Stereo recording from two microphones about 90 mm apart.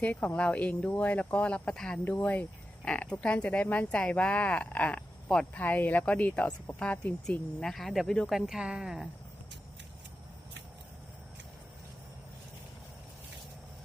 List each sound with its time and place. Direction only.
0.0 s speech: 15° left (ahead or behind)
7.6 s speech: centre (ahead or behind)
8.3 s speech: 5° right (ahead or behind)